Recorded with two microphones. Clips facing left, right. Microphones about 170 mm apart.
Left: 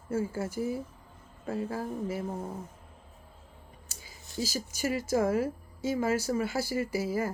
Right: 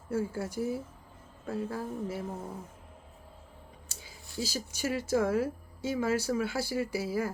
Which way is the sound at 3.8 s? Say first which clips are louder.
Right 1 dB; 45° left (ahead or behind).